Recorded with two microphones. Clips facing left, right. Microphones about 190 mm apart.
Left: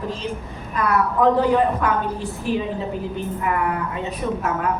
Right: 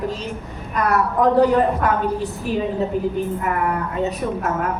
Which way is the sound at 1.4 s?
40° right (ahead or behind).